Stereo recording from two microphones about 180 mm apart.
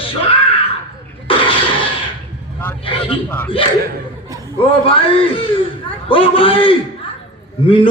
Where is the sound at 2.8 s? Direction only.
30° left (ahead or behind).